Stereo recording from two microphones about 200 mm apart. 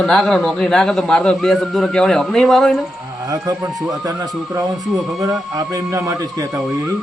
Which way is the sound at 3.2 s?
15° right (ahead or behind).